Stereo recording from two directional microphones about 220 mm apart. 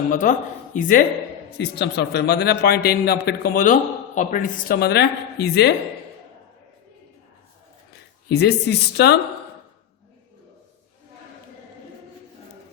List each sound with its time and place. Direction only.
0.1 s speech: 35° left (ahead or behind)
1.5 s a man's voice: 50° left (ahead or behind)
8.3 s a man's voice: 45° left (ahead or behind)